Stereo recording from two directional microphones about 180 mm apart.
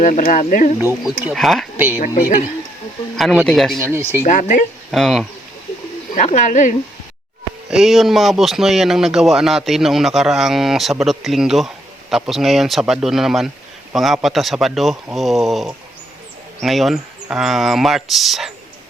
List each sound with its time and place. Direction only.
0.0 s speech: 45° left (ahead or behind)
0.8 s speech: 10° right (ahead or behind)
1.7 s speech: 10° right (ahead or behind)
3.4 s speech: centre (ahead or behind)
3.8 s speech: 15° right (ahead or behind)
4.3 s speech: 45° left (ahead or behind)
4.9 s speech: centre (ahead or behind)
6.1 s speech: 40° left (ahead or behind)
7.7 s speech: centre (ahead or behind)